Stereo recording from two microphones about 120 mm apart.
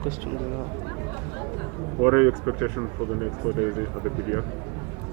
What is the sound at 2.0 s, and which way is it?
Speech, 25° right (ahead or behind).